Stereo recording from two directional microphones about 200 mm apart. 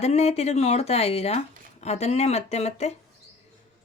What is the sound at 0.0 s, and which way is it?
A woman's voice, 35° left (ahead or behind).